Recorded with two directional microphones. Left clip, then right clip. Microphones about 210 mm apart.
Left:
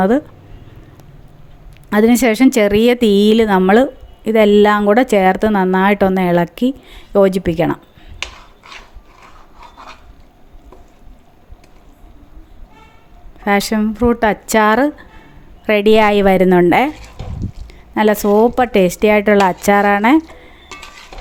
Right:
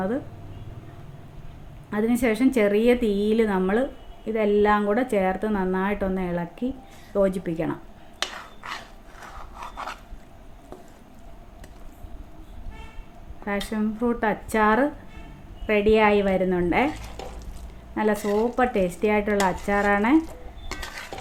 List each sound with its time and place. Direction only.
1.9 s speech: 50° left (ahead or behind)
13.4 s a woman's voice: 50° left (ahead or behind)
17.9 s speech: 50° left (ahead or behind)